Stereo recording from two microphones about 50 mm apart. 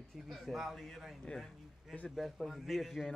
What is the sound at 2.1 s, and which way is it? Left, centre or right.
A man's voice, centre.